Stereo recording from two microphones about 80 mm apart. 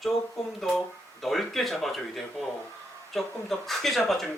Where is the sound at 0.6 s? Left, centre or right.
Centre.